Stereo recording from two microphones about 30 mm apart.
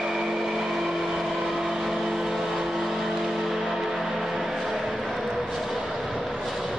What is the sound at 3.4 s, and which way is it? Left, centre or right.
Music, centre.